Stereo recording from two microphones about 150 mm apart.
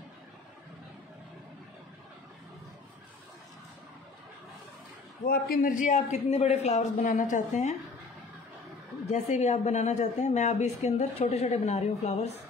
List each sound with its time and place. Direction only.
5.2 s a man's voice: 90° left; by 7.7 s 55° left (ahead or behind)
9.0 s a woman's voice: 50° left (ahead or behind)